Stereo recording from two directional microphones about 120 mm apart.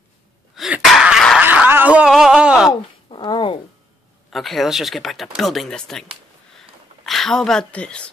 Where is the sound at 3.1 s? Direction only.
40° left (ahead or behind).